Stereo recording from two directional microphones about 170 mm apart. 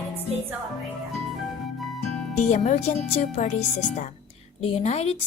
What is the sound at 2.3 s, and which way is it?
A woman's voice, 45° left (ahead or behind).